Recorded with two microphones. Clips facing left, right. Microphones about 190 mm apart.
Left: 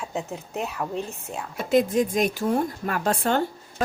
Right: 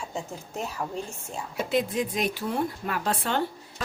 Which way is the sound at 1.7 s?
45° left (ahead or behind).